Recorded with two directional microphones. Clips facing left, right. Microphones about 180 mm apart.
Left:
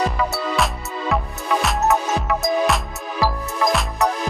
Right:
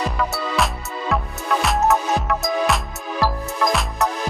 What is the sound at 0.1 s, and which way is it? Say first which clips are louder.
Music: left 1 dB; centre (ahead or behind).